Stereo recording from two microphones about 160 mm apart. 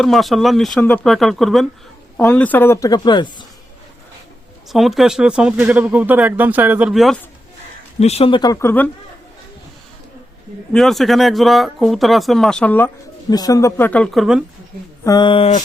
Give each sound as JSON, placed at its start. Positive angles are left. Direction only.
{"t": 0.0, "sound": "a woman's voice", "side_deg": 0}
{"t": 4.7, "sound": "speech", "side_deg": 0}
{"t": 7.9, "sound": "speech", "side_deg": 40}
{"t": 8.4, "sound": "speech", "side_deg": 25}
{"t": 10.7, "sound": "speech", "side_deg": 0}
{"t": 13.3, "sound": "a woman's voice", "side_deg": 20}
{"t": 15.0, "sound": "speech", "side_deg": 25}